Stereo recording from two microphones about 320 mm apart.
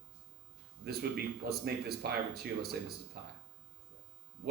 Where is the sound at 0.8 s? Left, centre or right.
Right.